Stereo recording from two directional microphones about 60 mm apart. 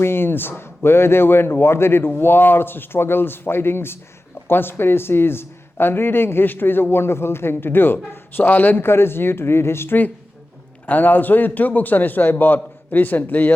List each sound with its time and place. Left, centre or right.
0.0 s speech: left
10.8 s speech: left